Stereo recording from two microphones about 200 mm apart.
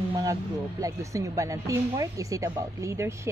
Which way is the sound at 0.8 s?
15° right (ahead or behind).